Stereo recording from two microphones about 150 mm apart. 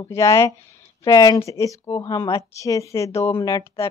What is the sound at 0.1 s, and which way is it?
A woman's voice, 20° left (ahead or behind).